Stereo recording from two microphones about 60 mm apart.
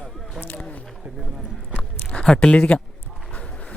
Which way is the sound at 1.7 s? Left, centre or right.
Centre.